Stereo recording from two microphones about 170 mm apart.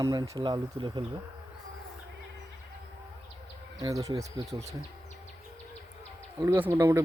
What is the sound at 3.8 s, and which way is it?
Speech, 20° right (ahead or behind).